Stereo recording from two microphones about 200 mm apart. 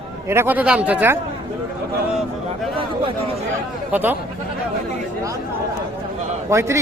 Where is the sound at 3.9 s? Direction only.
10° right (ahead or behind).